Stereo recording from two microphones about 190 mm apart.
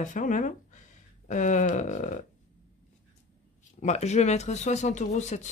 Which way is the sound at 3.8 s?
35° left (ahead or behind).